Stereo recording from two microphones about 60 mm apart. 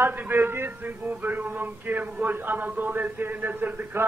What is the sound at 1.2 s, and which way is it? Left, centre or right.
A man's voice, right.